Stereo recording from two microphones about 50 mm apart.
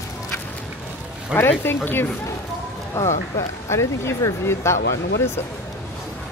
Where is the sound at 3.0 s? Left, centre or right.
Left.